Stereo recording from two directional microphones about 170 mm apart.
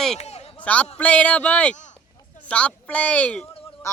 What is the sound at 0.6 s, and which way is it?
A man's voice, 10° left (ahead or behind).